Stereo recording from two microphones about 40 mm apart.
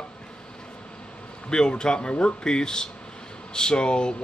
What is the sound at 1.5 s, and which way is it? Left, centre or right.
Speech, centre.